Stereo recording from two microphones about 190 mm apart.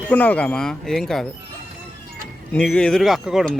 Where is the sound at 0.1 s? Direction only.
10° left (ahead or behind).